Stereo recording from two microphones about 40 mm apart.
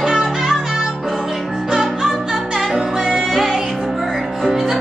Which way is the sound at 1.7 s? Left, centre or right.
Centre.